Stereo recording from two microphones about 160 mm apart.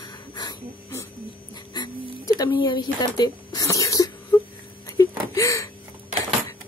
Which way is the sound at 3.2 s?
20° left (ahead or behind).